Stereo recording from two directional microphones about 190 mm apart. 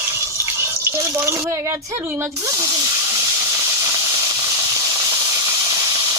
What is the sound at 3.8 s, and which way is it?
Steam, 20° right (ahead or behind).